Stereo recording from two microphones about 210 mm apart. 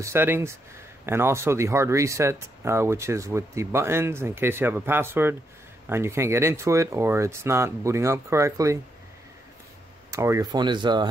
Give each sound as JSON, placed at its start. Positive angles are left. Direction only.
{"t": 0.0, "sound": "speech", "side_deg": -10}
{"t": 10.1, "sound": "speech", "side_deg": -15}